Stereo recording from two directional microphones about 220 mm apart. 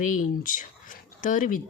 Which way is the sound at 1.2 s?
35° left (ahead or behind).